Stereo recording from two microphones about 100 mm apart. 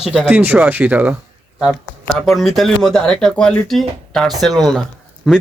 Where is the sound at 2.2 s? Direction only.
Centre (ahead or behind).